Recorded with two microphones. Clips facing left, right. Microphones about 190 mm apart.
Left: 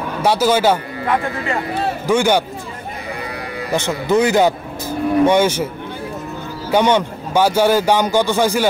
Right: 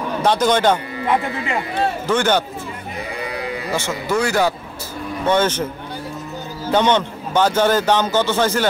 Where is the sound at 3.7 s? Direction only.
20° left (ahead or behind).